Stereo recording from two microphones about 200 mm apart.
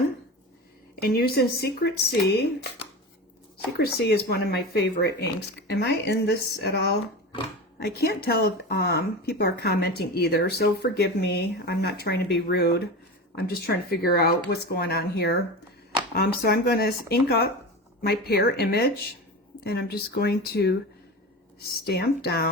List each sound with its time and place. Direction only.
1.0 s speech: 50° left (ahead or behind)
3.8 s speech: 55° left (ahead or behind)